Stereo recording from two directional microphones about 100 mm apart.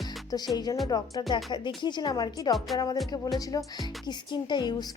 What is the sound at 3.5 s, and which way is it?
Speech, 35° left (ahead or behind).